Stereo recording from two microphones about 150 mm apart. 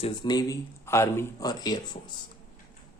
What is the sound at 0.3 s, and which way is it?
Speech, 25° left (ahead or behind).